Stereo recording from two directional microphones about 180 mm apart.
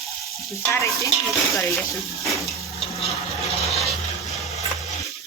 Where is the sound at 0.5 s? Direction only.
15° left (ahead or behind).